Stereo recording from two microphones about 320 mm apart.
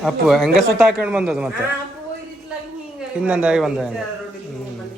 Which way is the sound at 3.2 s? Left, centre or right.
Centre.